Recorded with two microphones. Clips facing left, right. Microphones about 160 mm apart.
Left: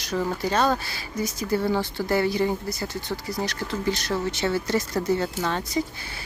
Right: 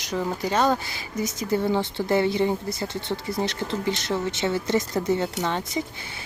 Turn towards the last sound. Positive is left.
turn(degrees=-20)  # may be behind; listen again after turning